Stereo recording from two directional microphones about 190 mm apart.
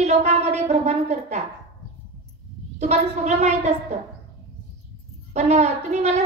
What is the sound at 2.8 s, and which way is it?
Speech, 35° right (ahead or behind).